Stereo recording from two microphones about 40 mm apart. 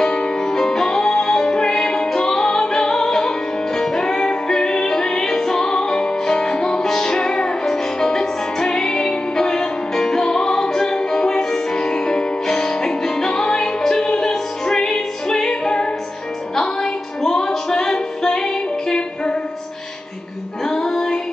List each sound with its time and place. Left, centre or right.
0.0 s music: centre
20.6 s music: centre